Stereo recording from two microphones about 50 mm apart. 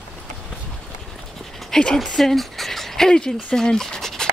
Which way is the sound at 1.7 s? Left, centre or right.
Centre.